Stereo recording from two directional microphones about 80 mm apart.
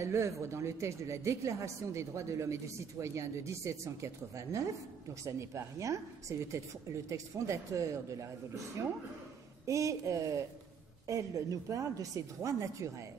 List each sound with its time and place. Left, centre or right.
0.0 s speech: right
9.7 s speech: right